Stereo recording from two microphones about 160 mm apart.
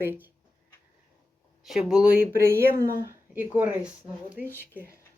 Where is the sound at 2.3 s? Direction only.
15° right (ahead or behind).